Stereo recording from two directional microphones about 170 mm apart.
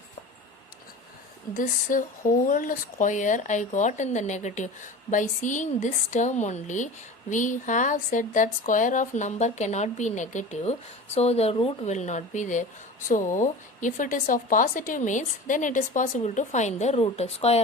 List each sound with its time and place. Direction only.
1.5 s a woman's voice: 50° left (ahead or behind)